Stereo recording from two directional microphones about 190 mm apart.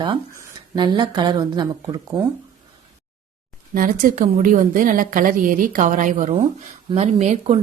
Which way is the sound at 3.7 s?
45° right (ahead or behind).